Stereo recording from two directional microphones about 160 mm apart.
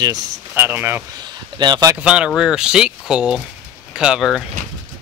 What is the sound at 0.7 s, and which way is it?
Speech, 15° right (ahead or behind).